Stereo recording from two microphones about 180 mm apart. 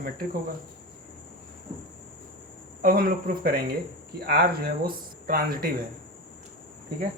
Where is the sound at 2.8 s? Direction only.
55° right (ahead or behind).